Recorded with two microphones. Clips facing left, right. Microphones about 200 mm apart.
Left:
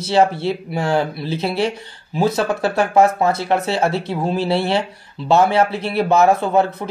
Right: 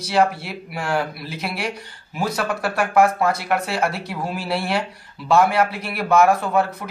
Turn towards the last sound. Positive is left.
turn(degrees=25)  # may be behind; listen again after turning